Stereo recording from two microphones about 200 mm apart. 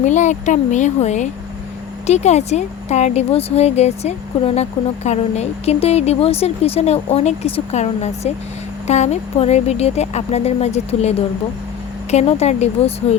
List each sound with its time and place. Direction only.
0.0 s speech: 35° left (ahead or behind)